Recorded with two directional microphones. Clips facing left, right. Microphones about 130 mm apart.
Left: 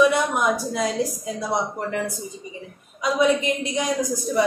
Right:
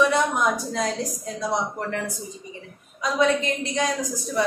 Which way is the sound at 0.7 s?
10° left (ahead or behind).